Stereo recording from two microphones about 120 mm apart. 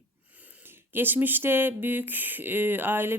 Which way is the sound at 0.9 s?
15° right (ahead or behind).